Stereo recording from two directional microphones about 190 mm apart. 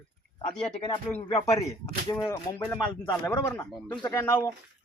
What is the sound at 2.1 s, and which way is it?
Speech, 20° left (ahead or behind).